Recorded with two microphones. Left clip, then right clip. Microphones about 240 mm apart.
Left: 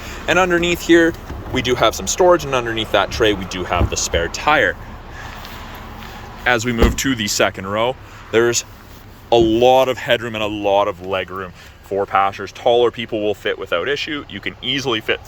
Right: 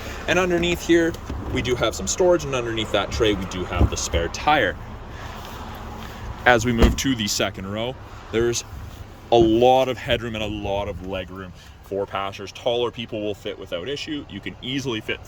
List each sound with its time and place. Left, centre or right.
0.3 s speech: centre
6.4 s speech: centre
11.9 s speech: left
12.3 s speech: centre
13.1 s speech: left
13.6 s speech: left
13.9 s speech: centre